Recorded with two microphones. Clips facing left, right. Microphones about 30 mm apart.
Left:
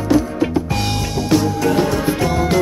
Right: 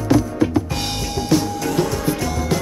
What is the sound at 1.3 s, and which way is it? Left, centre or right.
Music, left.